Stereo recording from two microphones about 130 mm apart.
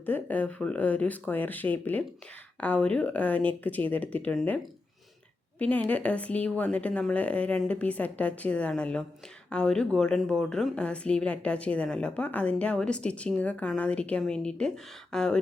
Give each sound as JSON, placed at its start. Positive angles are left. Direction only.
{"t": 0.0, "sound": "a woman's voice", "side_deg": 15}
{"t": 5.5, "sound": "a woman's voice", "side_deg": 10}